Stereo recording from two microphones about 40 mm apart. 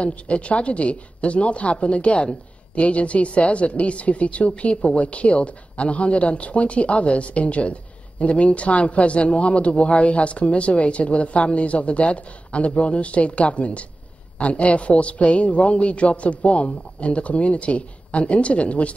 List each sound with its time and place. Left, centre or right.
0.0 s speech: left